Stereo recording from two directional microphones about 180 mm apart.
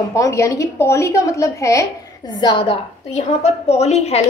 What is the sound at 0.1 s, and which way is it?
A woman's voice, 15° left (ahead or behind).